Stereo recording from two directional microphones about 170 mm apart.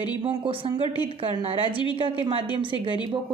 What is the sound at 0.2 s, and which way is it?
A woman's voice, 30° right (ahead or behind).